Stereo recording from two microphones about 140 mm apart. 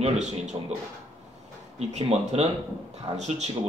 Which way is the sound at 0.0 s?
55° right (ahead or behind).